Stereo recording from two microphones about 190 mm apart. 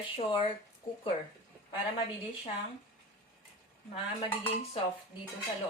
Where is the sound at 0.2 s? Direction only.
25° left (ahead or behind).